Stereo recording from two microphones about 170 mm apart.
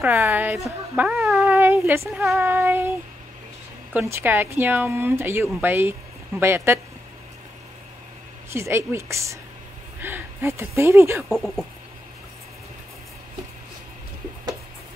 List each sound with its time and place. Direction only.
0.0 s speech: 10° right (ahead or behind)
1.4 s child singing: 15° right (ahead or behind)
2.4 s speech: 10° right (ahead or behind)
3.9 s speech: 15° right (ahead or behind)
8.5 s speech: 15° right (ahead or behind)
11.2 s speech: centre (ahead or behind)